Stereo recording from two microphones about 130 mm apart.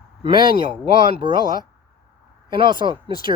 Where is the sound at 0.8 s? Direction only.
40° right (ahead or behind).